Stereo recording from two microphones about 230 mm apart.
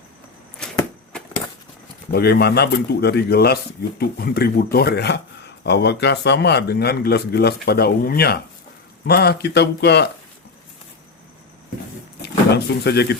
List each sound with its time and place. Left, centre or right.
0.6 s a sound: centre
2.1 s speech: left
12.5 s speech: left